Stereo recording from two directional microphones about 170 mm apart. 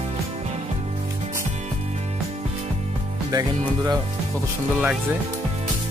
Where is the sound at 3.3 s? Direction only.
20° right (ahead or behind).